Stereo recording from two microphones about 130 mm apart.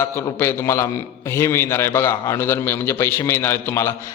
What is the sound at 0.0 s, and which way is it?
A man's voice, 20° left (ahead or behind).